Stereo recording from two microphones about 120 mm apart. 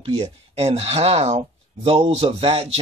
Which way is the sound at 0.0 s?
55° right (ahead or behind).